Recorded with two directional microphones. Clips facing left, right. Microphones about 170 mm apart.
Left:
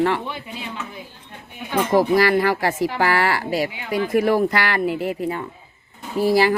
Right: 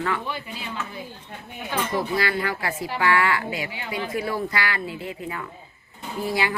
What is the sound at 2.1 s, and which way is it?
A woman's voice, 40° left (ahead or behind).